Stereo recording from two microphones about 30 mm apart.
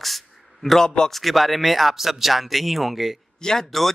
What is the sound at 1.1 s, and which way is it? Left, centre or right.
Speech, centre.